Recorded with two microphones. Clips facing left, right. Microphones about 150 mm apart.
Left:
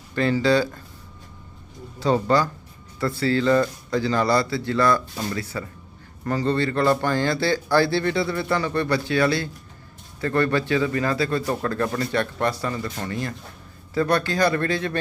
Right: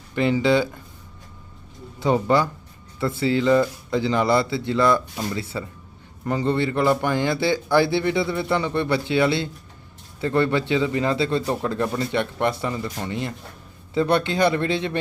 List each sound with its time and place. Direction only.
0.2 s speech: 20° right (ahead or behind)
2.0 s speech: 15° right (ahead or behind)